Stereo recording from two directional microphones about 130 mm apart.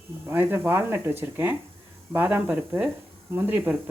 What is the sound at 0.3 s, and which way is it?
Speech, 15° right (ahead or behind).